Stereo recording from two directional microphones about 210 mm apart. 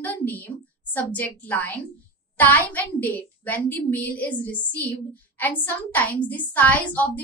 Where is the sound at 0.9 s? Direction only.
10° left (ahead or behind).